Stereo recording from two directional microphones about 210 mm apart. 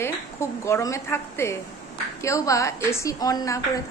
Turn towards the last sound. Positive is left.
turn(degrees=15)  # may be behind; listen again after turning